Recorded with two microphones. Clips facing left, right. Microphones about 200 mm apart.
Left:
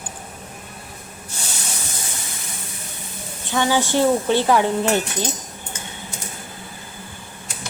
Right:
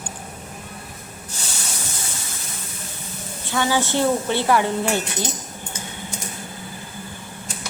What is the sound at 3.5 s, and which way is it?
A woman's voice, 15° left (ahead or behind).